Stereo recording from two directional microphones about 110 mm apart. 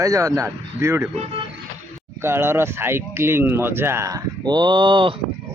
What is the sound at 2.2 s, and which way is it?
Speech, 20° right (ahead or behind).